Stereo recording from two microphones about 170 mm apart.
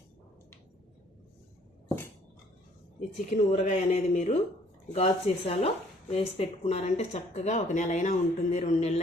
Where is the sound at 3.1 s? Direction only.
40° left (ahead or behind).